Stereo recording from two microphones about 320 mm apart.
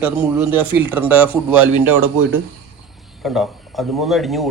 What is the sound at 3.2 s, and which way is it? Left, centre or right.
A man's voice, centre.